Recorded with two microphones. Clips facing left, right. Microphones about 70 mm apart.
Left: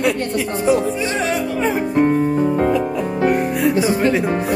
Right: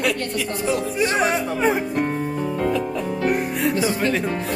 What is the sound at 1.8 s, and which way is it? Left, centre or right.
Music, centre.